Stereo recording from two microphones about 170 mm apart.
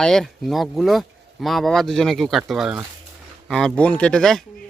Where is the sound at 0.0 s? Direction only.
5° left (ahead or behind).